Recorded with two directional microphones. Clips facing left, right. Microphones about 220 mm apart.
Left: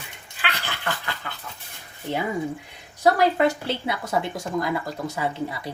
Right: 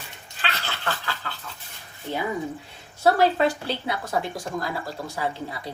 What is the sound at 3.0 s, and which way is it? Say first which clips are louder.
A woman's voice: left 1 dB; 20° left (ahead or behind).